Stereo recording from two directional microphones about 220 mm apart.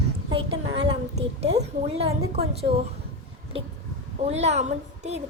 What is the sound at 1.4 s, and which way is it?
A woman's voice, 30° right (ahead or behind).